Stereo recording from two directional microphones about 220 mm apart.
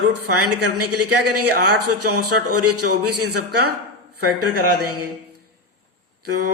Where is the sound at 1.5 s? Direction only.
45° right (ahead or behind).